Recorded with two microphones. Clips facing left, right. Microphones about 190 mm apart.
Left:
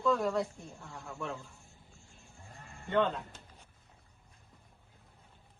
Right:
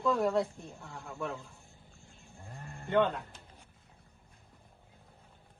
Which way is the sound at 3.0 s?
5° right (ahead or behind).